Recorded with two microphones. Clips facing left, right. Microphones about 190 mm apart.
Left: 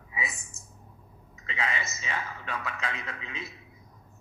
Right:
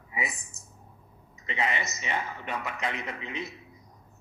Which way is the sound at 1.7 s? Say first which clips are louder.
Right 3 dB; 20° right (ahead or behind).